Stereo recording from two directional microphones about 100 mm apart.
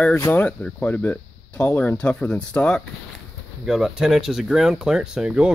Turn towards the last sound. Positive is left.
turn(degrees=-10)  # may be behind; listen again after turning